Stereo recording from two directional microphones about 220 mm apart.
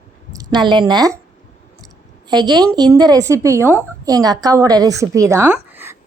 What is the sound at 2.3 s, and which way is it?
A woman's voice, 20° right (ahead or behind).